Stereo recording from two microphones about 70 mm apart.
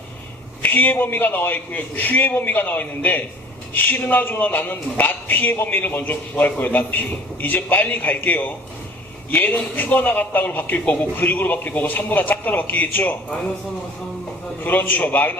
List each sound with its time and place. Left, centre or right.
0.6 s a man's voice: left
14.6 s speech: left